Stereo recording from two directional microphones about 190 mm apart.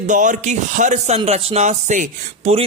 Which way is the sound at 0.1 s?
40° right (ahead or behind).